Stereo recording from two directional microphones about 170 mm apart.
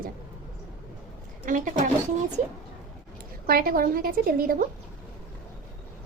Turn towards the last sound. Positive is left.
turn(degrees=-60)  # may be behind; listen again after turning